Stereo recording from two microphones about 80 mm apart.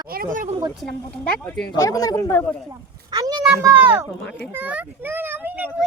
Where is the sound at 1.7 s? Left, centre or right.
Left.